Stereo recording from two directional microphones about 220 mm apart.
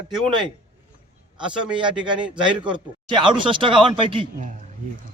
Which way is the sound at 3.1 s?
20° right (ahead or behind).